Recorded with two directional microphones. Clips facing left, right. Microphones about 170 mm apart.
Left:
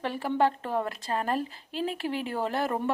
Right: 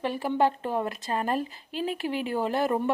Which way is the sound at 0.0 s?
10° right (ahead or behind).